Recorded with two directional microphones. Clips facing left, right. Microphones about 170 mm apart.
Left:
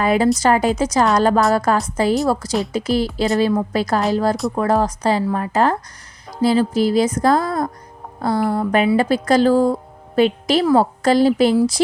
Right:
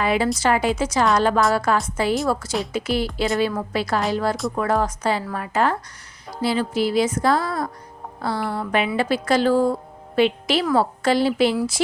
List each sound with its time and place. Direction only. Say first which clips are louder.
0.0 s a woman's voice: left 5 dB; 45° left (ahead or behind)